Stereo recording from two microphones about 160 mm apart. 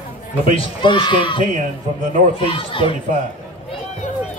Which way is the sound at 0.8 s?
30° left (ahead or behind).